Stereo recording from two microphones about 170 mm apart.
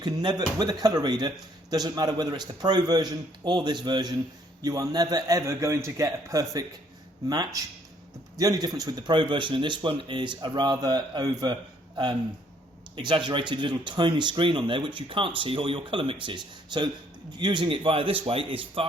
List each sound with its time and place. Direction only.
0.0 s speech: 25° right (ahead or behind)
13.0 s a man's voice: 25° right (ahead or behind)